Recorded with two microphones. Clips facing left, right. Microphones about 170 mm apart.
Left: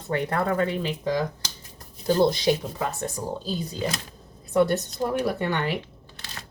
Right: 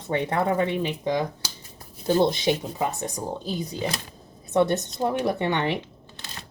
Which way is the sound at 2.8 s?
20° right (ahead or behind).